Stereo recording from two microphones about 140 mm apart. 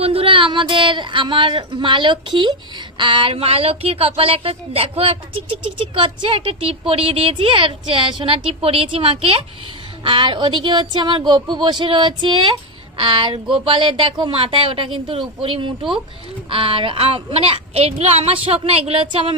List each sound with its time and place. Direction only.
0.0 s speech: 40° right (ahead or behind)